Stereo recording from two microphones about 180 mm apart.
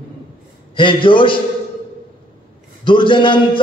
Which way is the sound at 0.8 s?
30° left (ahead or behind).